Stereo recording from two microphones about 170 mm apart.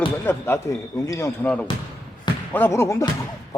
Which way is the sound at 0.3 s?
15° left (ahead or behind).